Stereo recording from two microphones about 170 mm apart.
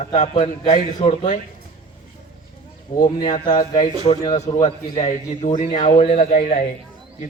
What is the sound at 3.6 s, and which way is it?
A man's voice, 45° left (ahead or behind).